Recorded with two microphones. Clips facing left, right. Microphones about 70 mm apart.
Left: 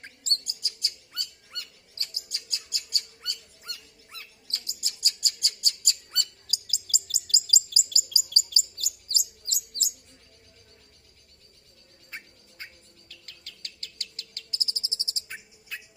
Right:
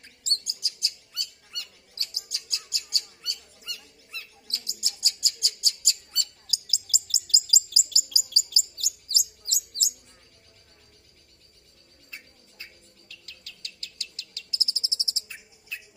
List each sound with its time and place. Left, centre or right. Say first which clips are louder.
0.0 s bird: left 1 dB; left
6.9 s chirp: right 1 dB; left
13.1 s bird: right 1 dB; left